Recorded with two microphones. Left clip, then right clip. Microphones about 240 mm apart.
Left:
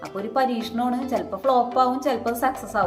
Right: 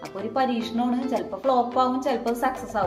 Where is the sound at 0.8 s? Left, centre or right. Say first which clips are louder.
Left 2 dB; centre.